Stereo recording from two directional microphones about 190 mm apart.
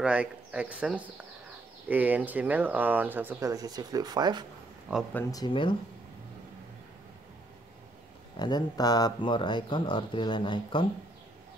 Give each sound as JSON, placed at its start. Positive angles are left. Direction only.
{"t": 0.0, "sound": "speech", "side_deg": -5}
{"t": 5.1, "sound": "speech", "side_deg": 20}
{"t": 8.4, "sound": "speech", "side_deg": 20}